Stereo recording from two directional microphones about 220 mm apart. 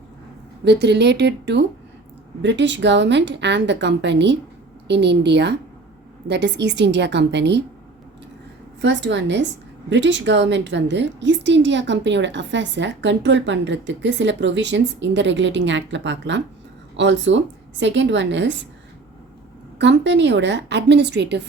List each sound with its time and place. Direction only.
0.6 s a woman's voice: 50° right (ahead or behind)
8.8 s a woman's voice: 55° right (ahead or behind)
19.8 s a woman's voice: 55° right (ahead or behind)